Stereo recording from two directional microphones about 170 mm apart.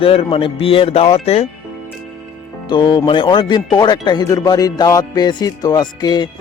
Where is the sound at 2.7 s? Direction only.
25° left (ahead or behind).